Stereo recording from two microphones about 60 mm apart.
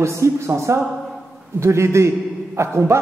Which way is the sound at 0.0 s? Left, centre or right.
Right.